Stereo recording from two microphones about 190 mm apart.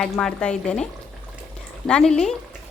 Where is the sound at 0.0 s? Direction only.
5° left (ahead or behind).